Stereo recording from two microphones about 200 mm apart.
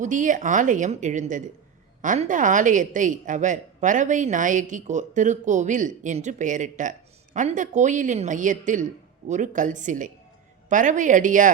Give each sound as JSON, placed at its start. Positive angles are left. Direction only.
{"t": 0.0, "sound": "a woman's voice", "side_deg": -40}